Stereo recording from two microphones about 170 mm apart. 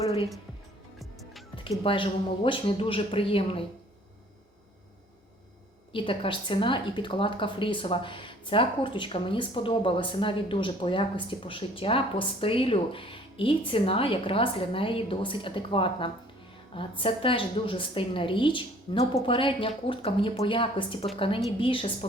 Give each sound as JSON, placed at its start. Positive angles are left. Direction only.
{"t": 0.9, "sound": "music", "side_deg": 0}
{"t": 1.8, "sound": "speech", "side_deg": 30}
{"t": 5.9, "sound": "a woman's voice", "side_deg": 30}